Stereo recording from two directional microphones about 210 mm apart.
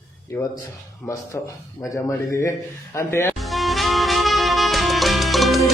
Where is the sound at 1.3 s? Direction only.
10° left (ahead or behind).